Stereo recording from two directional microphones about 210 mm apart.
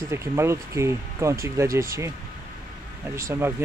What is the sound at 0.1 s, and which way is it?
Speech, 10° right (ahead or behind).